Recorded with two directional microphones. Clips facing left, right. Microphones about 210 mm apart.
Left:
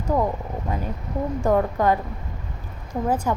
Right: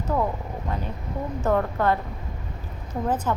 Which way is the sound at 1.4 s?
15° left (ahead or behind).